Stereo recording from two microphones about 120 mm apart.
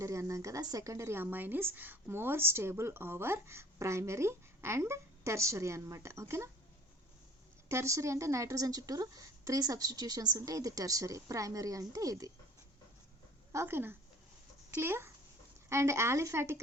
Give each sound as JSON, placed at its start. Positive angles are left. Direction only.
{"t": 0.0, "sound": "speech", "side_deg": -25}
{"t": 7.7, "sound": "speech", "side_deg": -25}
{"t": 13.5, "sound": "speech", "side_deg": -20}